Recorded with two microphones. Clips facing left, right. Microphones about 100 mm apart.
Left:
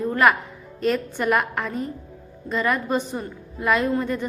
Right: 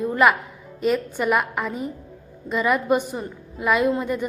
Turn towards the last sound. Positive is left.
turn(degrees=-10)  # may be behind; listen again after turning